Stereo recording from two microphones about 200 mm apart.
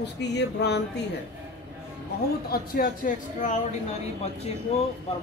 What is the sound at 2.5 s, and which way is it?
Speech, 45° left (ahead or behind).